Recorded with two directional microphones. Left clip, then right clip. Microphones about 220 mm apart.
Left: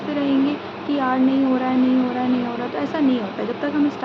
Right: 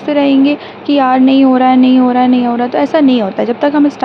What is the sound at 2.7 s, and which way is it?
A woman's voice, 40° right (ahead or behind).